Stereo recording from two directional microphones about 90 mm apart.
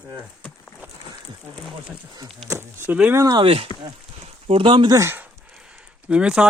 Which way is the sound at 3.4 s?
90° right.